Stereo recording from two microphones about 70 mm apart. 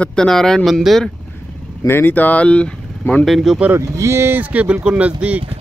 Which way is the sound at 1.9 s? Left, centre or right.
Left.